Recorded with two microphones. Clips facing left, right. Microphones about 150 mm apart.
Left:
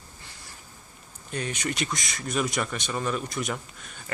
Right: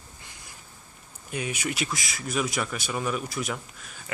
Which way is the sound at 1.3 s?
10° right (ahead or behind).